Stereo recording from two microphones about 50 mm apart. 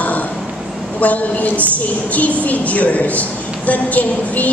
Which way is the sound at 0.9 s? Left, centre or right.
Left.